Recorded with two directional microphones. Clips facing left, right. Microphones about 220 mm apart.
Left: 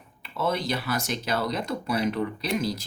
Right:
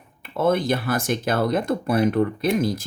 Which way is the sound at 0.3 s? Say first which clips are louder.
Right 7 dB; 50° right (ahead or behind).